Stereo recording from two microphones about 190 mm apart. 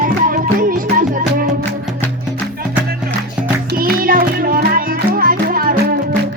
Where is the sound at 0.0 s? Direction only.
45° right (ahead or behind).